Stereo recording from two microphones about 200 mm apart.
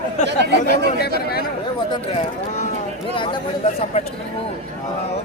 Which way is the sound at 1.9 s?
30° left (ahead or behind).